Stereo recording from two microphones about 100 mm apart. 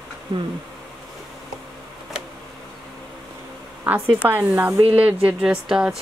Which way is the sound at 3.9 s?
15° right (ahead or behind).